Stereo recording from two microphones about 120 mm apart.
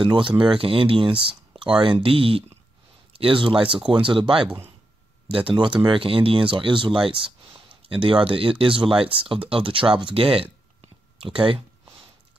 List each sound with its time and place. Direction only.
0.0 s speech: 45° right (ahead or behind)